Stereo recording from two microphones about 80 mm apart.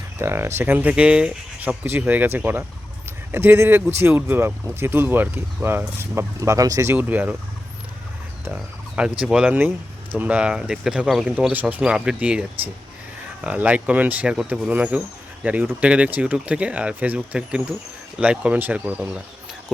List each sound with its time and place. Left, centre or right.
0.2 s speech: right
6.9 s speech: right
8.5 s speech: centre
9.5 s speech: right; by 11.3 s centre
11.3 s speech: centre
11.8 s speech: centre